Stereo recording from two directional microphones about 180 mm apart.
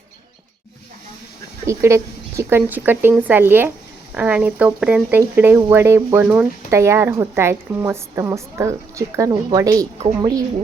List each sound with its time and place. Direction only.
1.6 s speech: 15° right (ahead or behind)